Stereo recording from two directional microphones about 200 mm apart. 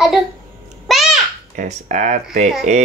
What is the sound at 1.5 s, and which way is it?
Speech, 40° right (ahead or behind).